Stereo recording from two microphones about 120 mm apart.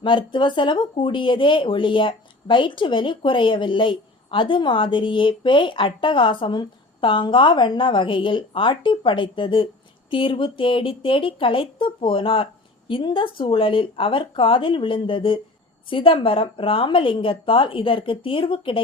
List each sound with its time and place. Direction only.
0.0 s speech: 40° left (ahead or behind)